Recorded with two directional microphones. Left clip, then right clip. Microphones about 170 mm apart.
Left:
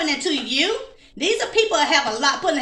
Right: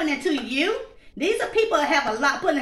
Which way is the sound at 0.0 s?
25° right (ahead or behind).